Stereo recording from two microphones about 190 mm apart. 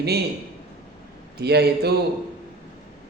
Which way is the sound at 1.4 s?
60° right (ahead or behind).